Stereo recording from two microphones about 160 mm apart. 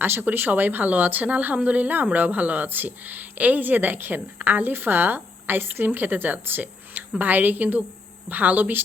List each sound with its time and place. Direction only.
0.0 s a woman's voice: 10° right (ahead or behind)